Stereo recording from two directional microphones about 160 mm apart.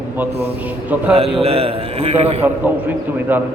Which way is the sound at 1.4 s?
40° right (ahead or behind).